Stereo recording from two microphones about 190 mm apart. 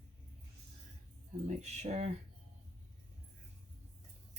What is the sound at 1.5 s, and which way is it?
Speech, 35° right (ahead or behind).